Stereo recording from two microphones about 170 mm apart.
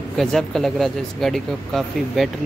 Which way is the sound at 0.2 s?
Centre (ahead or behind).